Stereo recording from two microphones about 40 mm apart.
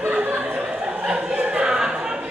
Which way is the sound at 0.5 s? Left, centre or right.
Right.